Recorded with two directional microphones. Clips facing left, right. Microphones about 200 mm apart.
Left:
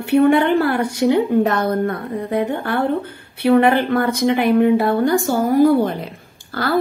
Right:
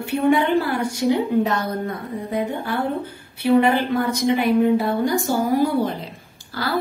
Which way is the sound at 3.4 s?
60° left (ahead or behind).